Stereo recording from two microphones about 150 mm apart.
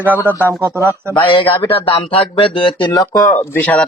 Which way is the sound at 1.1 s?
35° left (ahead or behind).